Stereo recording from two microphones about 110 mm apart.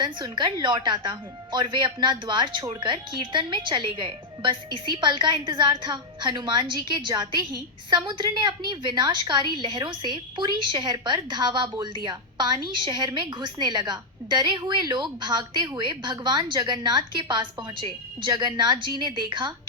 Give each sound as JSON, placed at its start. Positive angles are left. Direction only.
{"t": 0.0, "sound": "a woman's voice", "side_deg": -45}